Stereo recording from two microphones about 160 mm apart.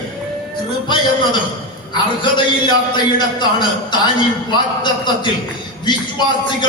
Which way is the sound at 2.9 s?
30° left (ahead or behind).